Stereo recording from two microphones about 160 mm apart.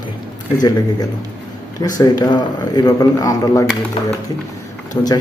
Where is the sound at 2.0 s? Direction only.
25° left (ahead or behind).